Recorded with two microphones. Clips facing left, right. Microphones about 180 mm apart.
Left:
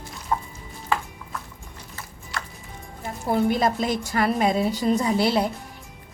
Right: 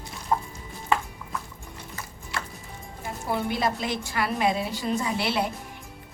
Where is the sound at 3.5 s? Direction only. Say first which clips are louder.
Left 5 dB; 45° left (ahead or behind).